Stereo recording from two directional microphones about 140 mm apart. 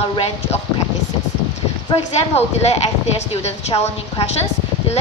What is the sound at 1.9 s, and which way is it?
A woman's voice, 50° left (ahead or behind).